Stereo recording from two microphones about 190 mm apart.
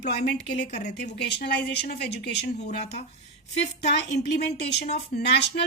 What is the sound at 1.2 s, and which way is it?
A woman's voice, 55° left (ahead or behind).